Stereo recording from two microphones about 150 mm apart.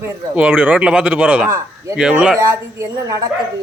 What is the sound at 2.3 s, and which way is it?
Speech, 20° right (ahead or behind).